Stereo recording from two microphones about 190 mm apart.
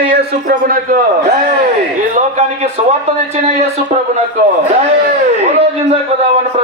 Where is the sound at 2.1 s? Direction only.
35° right (ahead or behind).